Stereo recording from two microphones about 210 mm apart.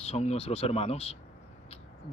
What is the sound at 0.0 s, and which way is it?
A man's voice, 30° left (ahead or behind).